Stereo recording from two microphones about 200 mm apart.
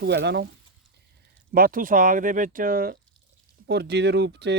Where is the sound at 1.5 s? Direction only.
45° right (ahead or behind).